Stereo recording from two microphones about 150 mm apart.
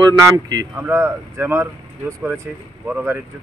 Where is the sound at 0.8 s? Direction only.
15° right (ahead or behind).